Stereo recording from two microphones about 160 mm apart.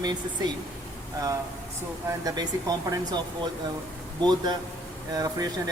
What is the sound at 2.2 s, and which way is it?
Speech, 25° right (ahead or behind).